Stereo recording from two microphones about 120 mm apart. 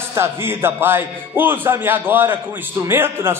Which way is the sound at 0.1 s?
20° right (ahead or behind).